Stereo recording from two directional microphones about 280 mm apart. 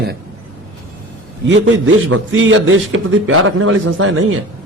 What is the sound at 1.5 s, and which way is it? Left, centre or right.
A man's voice, right.